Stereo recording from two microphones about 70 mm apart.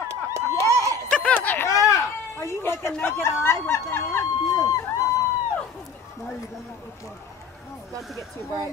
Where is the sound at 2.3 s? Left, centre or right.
Left.